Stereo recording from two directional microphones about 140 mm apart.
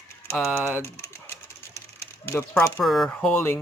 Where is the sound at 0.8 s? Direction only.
20° left (ahead or behind).